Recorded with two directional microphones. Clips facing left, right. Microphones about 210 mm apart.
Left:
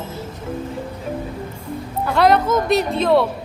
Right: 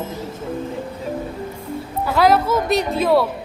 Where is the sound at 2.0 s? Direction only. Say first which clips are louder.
Even; 5° right (ahead or behind).